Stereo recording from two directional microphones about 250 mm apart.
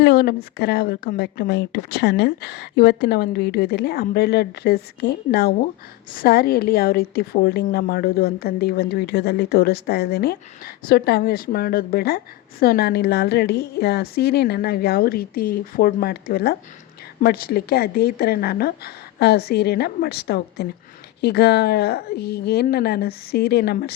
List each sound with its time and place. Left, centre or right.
0.0 s a woman's voice: left